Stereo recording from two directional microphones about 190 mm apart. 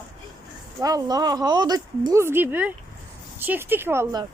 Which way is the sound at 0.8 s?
20° right (ahead or behind).